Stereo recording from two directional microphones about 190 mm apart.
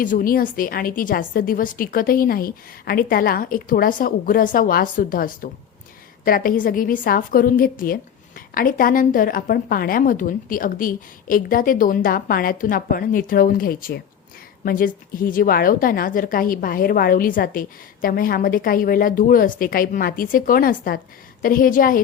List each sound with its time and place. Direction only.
0.0 s a woman's voice: 45° left (ahead or behind)